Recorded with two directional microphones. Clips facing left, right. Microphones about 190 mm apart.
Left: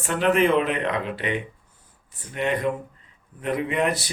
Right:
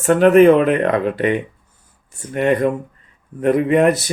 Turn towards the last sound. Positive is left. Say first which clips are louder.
# right 10 dB
turn(degrees=-50)  # may be behind; listen again after turning